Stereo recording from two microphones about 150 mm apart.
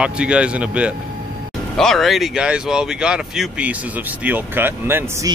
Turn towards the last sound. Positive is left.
turn(degrees=-15)  # may be behind; listen again after turning